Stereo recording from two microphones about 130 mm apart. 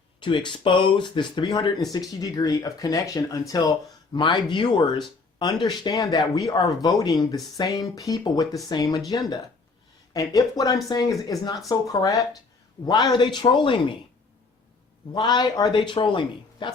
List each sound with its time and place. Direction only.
0.2 s speech: 40° left (ahead or behind)
4.1 s speech: 35° left (ahead or behind)
15.1 s speech: 35° left (ahead or behind)